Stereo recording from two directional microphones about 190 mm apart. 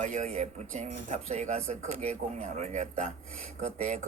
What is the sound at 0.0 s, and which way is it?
A man's voice, 40° right (ahead or behind).